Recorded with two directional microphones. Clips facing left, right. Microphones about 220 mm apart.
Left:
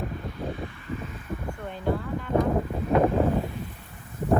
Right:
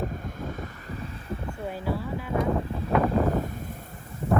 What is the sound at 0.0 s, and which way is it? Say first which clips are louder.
Wind: even; 45° right (ahead or behind).